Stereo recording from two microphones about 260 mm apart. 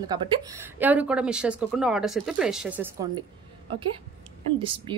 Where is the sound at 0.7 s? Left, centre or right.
Centre.